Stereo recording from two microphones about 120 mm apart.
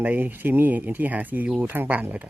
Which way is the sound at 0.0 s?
15° right (ahead or behind).